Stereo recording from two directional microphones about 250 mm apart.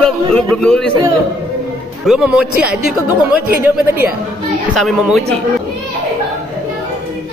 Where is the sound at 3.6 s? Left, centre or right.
Centre.